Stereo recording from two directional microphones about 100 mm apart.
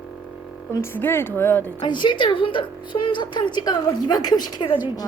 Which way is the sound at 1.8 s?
50° left (ahead or behind).